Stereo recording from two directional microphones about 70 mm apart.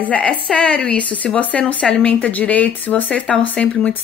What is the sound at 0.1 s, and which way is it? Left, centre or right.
Speech, centre.